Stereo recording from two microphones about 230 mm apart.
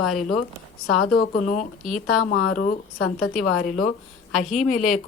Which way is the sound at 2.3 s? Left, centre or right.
Left.